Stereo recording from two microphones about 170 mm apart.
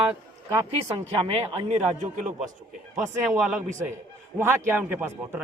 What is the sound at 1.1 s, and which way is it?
Speech, 35° right (ahead or behind).